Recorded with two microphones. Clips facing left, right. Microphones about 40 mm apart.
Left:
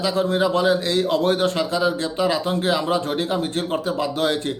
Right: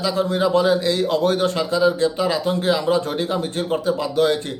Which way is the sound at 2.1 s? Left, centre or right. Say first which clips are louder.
Even; left.